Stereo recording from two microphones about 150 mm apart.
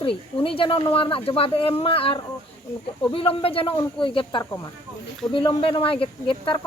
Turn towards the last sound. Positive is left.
turn(degrees=35)  # may be behind; listen again after turning